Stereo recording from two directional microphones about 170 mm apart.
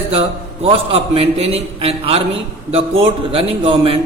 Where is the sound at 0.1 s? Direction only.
35° right (ahead or behind).